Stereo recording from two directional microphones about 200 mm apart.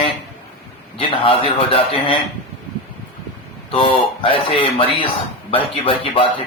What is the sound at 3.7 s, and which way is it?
Speech, 25° left (ahead or behind).